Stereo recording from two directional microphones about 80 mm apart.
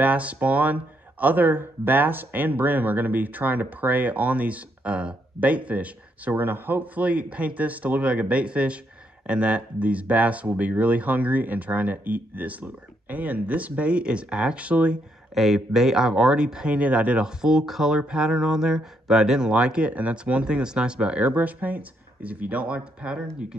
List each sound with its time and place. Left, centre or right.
0.0 s speech: centre
15.3 s speech: centre